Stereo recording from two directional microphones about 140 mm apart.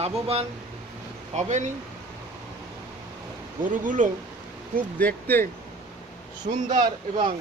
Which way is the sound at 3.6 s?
70° right (ahead or behind).